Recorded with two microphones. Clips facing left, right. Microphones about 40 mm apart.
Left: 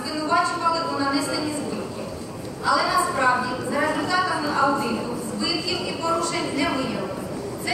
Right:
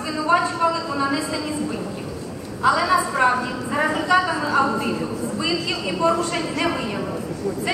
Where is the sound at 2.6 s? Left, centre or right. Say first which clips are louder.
Right 3 dB; right.